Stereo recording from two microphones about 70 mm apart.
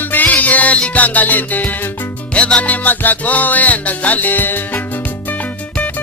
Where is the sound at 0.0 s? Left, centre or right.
Left.